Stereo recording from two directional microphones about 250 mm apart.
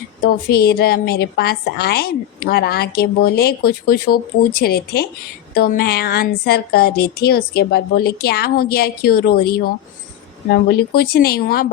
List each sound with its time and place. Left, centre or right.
0.2 s a woman's voice: left